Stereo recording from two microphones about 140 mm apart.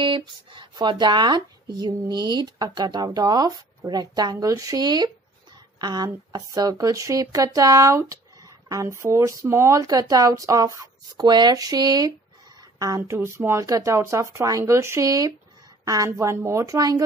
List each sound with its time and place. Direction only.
0.0 s speech: 35° right (ahead or behind)